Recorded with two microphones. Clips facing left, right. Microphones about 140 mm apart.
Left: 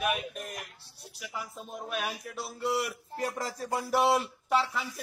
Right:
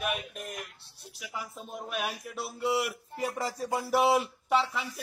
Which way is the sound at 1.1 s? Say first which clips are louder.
Even; centre (ahead or behind).